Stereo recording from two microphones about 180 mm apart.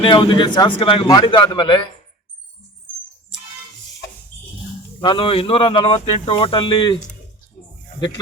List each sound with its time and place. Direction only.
0.0 s speech: 25° left (ahead or behind)
4.9 s speech: 30° left (ahead or behind)